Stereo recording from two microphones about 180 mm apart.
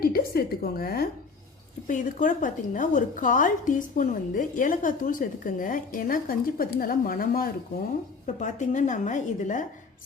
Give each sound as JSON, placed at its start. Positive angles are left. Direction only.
{"t": 0.0, "sound": "a woman's voice", "side_deg": 55}
{"t": 1.9, "sound": "a woman's voice", "side_deg": 45}
{"t": 8.4, "sound": "a woman's voice", "side_deg": 40}